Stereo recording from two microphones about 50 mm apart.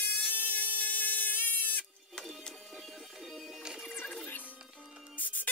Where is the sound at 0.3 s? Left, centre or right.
Left.